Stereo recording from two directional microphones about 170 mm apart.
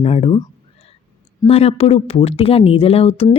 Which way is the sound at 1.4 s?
35° left (ahead or behind).